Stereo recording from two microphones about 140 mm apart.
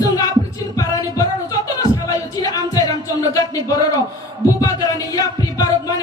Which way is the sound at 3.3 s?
25° left (ahead or behind).